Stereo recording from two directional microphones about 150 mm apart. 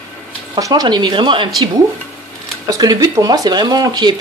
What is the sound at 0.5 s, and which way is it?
Speech, 25° right (ahead or behind).